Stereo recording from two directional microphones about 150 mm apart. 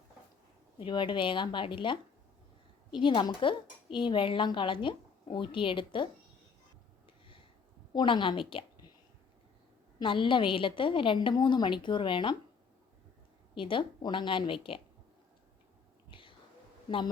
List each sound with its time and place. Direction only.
0.8 s speech: 35° left (ahead or behind)
7.9 s a woman's voice: 35° left (ahead or behind)
10.0 s speech: 35° left (ahead or behind)
13.6 s speech: 35° left (ahead or behind)
16.0 s whispering: 35° left (ahead or behind)